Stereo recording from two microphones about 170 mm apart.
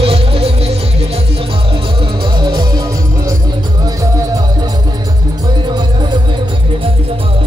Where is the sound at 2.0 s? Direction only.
30° right (ahead or behind).